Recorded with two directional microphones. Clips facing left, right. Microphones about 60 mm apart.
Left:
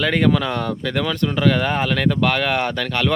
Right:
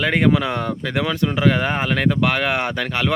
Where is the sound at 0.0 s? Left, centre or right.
Centre.